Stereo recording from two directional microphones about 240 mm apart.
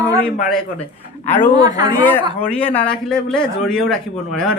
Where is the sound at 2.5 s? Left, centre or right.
Centre.